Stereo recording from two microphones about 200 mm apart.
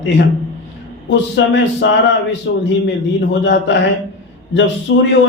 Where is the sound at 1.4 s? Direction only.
65° left (ahead or behind).